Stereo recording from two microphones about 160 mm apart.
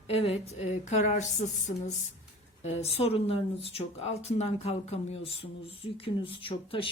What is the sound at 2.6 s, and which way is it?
Speech, 40° left (ahead or behind).